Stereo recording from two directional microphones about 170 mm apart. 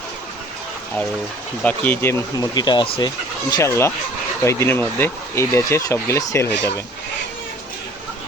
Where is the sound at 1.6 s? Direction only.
10° left (ahead or behind); by 2.9 s 25° left (ahead or behind).